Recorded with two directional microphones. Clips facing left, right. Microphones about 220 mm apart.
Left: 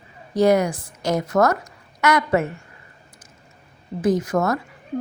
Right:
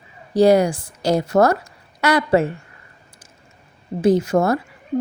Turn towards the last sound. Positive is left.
turn(degrees=-30)  # may be behind; listen again after turning